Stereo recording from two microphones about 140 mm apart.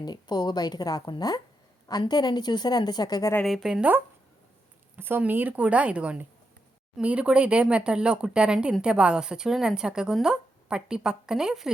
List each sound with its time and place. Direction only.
0.0 s a woman's voice: 30° left (ahead or behind)
3.4 s a woman's voice: centre (ahead or behind)